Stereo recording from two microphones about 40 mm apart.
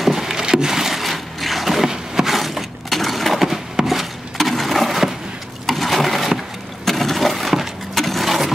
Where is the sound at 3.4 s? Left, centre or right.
Centre.